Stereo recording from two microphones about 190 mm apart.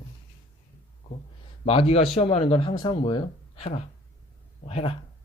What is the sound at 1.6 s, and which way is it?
Speech, 30° left (ahead or behind).